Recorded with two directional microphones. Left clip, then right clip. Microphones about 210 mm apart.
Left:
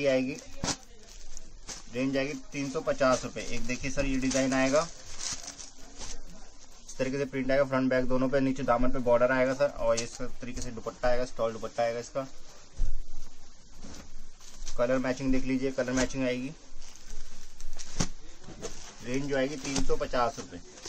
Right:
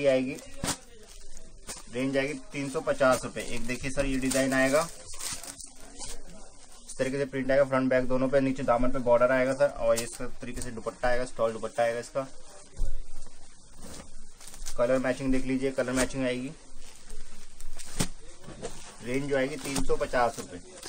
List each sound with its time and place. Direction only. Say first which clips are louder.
0.0 s speech: right 2 dB; 5° left (ahead or behind)
1.9 s a man's voice: right 2 dB; centre (ahead or behind)
7.0 s a man's voice: right 1 dB; centre (ahead or behind)
14.8 s a man's voice: right 2 dB; 5° left (ahead or behind)
17.7 s a sound: right 1 dB; centre (ahead or behind)
19.0 s a man's voice: right 2 dB; centre (ahead or behind)